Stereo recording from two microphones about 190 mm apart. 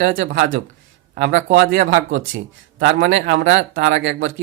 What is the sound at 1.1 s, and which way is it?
Speech, 70° right (ahead or behind).